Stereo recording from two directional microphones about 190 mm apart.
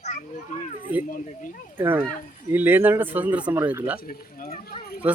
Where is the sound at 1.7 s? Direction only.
10° right (ahead or behind).